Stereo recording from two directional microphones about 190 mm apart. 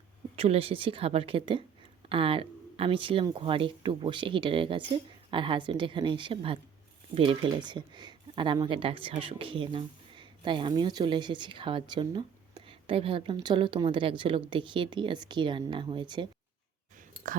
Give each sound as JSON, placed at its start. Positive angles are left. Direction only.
{"t": 0.3, "sound": "speech", "side_deg": -30}